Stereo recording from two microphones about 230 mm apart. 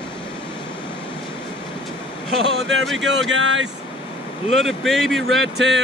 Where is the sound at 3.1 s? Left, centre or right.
Right.